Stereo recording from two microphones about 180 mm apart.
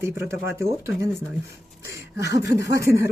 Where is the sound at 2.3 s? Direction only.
20° right (ahead or behind).